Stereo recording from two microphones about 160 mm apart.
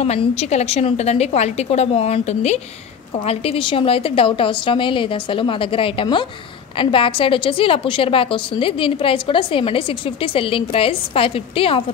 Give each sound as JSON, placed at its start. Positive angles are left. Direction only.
{"t": 0.0, "sound": "a woman's voice", "side_deg": 40}